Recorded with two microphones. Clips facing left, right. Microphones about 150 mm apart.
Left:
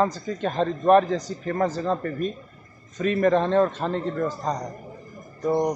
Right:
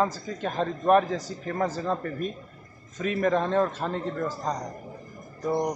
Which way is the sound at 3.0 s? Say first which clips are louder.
Left 4 dB; 10° right (ahead or behind).